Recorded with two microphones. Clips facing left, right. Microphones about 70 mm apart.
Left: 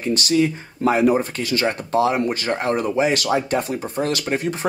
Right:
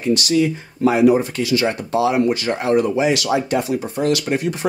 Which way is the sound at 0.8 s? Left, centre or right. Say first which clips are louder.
Right 3 dB; left.